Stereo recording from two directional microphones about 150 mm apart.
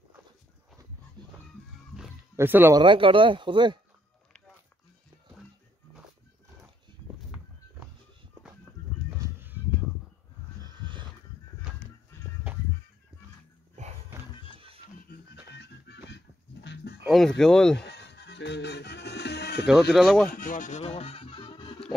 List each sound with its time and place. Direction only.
1.2 s music: 30° right (ahead or behind)
1.9 s a sound: 5° right (ahead or behind)
2.3 s speech: 15° right (ahead or behind)
2.8 s speech: 35° right (ahead or behind)
9.2 s a sound: 15° right (ahead or behind)
10.6 s horse: 30° right (ahead or behind)
12.1 s music: 15° left (ahead or behind)
13.8 s music: 55° right (ahead or behind)
15.1 s music: 75° left (ahead or behind)
17.0 s a sound: centre (ahead or behind)
17.9 s music: 90° left
19.9 s speech: centre (ahead or behind)
20.2 s music: 60° left (ahead or behind); by 21.8 s 35° left (ahead or behind)